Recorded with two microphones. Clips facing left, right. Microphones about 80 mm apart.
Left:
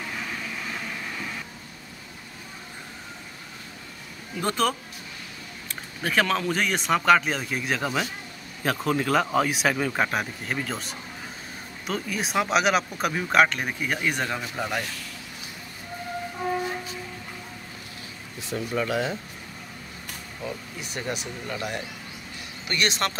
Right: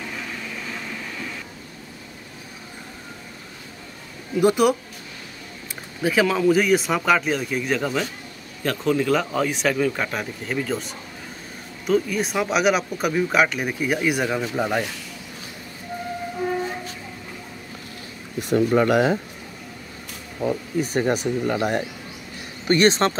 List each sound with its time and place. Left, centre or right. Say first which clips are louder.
4.4 s speech: right 8 dB; centre
6.0 s speech: right 5 dB; centre
18.4 s speech: right 10 dB; right
20.8 s speech: right 10 dB; right